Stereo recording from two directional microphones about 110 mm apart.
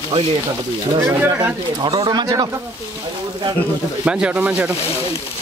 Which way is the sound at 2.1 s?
40° right (ahead or behind).